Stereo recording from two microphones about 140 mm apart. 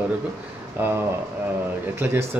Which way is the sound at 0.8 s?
15° right (ahead or behind).